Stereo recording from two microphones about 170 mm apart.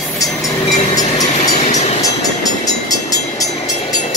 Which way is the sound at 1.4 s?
45° left (ahead or behind).